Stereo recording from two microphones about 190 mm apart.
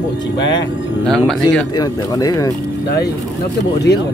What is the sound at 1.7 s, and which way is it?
Speech, 20° left (ahead or behind).